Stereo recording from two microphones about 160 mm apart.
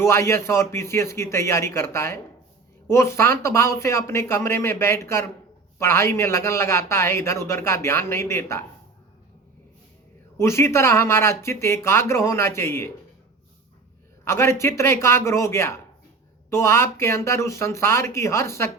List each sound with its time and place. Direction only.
0.0 s a man's voice: 15° left (ahead or behind)
10.3 s a man's voice: 15° left (ahead or behind)
14.3 s a man's voice: 15° left (ahead or behind)